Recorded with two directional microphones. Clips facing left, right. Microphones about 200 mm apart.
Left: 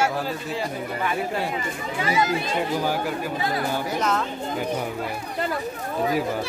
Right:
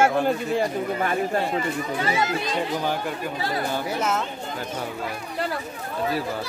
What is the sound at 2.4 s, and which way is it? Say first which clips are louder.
Speech: left 1 dB; 10° left (ahead or behind).